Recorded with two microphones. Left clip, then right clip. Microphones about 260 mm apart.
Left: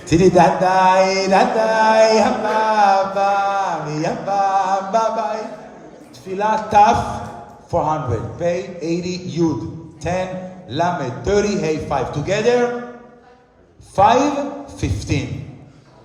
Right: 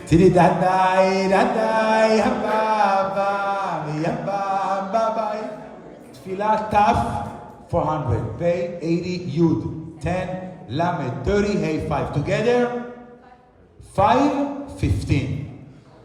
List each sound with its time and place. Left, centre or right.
0.0 s music: left
6.3 s a man's voice: left
13.9 s a man's voice: left